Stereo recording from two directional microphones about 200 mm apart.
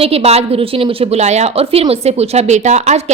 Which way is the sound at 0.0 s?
30° right (ahead or behind).